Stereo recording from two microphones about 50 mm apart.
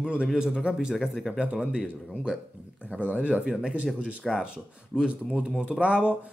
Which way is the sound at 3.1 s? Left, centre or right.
Right.